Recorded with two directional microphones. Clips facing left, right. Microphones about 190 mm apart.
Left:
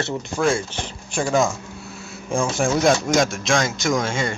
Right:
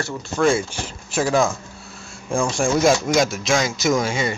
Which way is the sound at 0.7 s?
5° right (ahead or behind).